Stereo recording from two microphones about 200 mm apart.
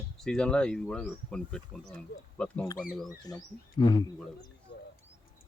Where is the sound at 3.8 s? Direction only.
20° left (ahead or behind).